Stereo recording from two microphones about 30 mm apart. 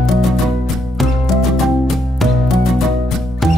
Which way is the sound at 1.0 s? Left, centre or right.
Centre.